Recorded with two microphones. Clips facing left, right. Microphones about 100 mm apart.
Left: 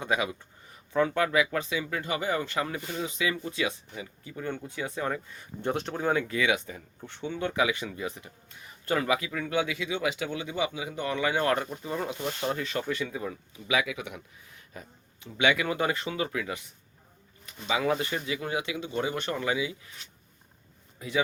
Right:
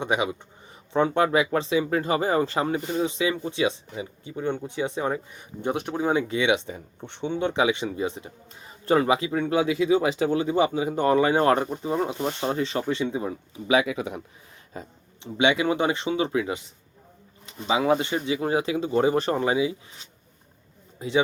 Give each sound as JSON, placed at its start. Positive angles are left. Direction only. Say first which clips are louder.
{"t": 0.0, "sound": "speech", "louder": "right 4 dB", "side_deg": -20}